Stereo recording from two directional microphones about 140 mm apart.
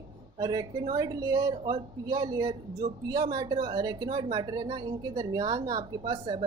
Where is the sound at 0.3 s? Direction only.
25° right (ahead or behind).